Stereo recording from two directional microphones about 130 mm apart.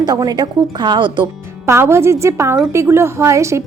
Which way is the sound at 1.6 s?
20° right (ahead or behind).